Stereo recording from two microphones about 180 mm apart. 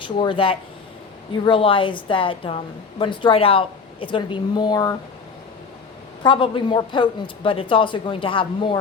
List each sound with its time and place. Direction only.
0.0 s speech: 30° left (ahead or behind)
6.2 s speech: 30° left (ahead or behind)